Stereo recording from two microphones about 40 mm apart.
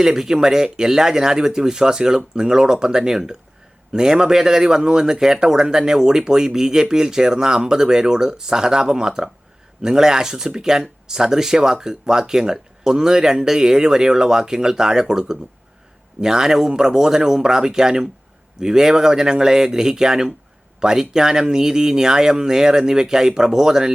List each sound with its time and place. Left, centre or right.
0.0 s speech: centre